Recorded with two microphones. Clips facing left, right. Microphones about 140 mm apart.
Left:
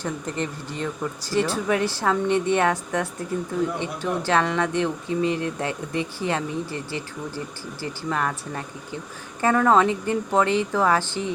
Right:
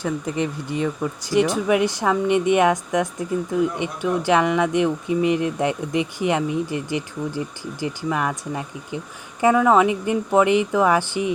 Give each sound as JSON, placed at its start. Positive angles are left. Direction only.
{"t": 0.0, "sound": "speech", "side_deg": -10}